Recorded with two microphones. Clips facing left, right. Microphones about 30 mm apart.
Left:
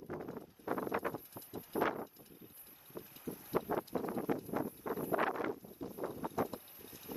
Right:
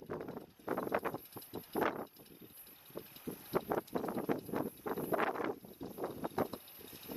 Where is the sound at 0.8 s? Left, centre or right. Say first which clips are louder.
Right 1 dB; right.